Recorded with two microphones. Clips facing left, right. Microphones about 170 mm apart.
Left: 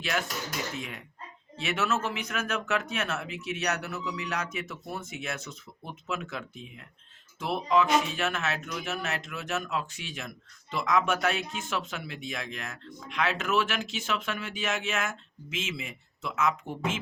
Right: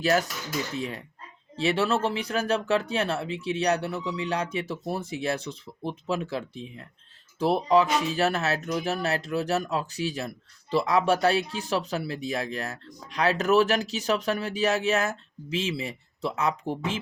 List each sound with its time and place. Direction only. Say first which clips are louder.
0.0 s speech: right 7 dB; 40° right (ahead or behind)